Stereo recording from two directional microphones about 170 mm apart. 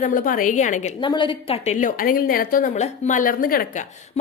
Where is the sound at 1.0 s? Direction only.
30° left (ahead or behind).